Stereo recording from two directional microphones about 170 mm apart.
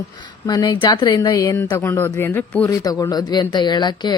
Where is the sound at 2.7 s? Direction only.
20° left (ahead or behind).